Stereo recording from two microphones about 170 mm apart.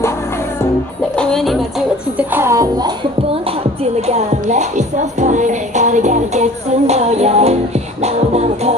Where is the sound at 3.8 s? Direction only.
40° right (ahead or behind).